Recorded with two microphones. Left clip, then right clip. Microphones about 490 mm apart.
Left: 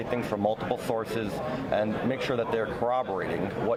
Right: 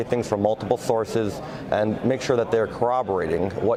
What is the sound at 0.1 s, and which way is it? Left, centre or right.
Speech, right.